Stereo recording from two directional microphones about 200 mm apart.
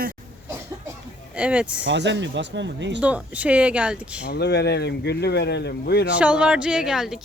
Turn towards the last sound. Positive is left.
turn(degrees=0)  # may be behind; listen again after turning